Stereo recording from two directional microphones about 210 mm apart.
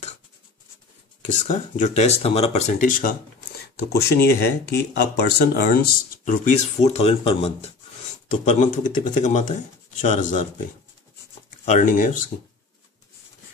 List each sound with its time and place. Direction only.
1.2 s speech: 35° left (ahead or behind)
3.9 s speech: 50° left (ahead or behind); by 10.4 s 35° left (ahead or behind)
11.6 s speech: 40° left (ahead or behind)